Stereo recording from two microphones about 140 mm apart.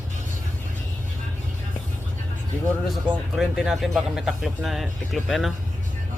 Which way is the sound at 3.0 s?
5° right (ahead or behind).